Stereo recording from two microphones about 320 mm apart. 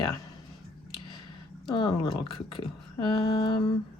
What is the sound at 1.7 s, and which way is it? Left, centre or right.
Speech, centre.